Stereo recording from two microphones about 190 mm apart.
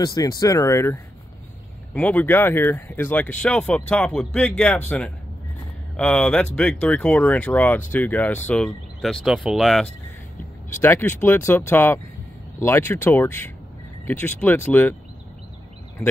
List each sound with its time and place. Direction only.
0.0 s speech: 20° left (ahead or behind); by 9.8 s centre (ahead or behind)
10.8 s speech: 10° left (ahead or behind)